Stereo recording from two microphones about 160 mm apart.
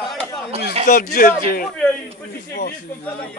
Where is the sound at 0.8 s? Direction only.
65° left (ahead or behind).